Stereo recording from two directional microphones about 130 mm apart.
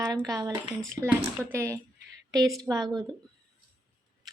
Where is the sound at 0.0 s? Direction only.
25° right (ahead or behind).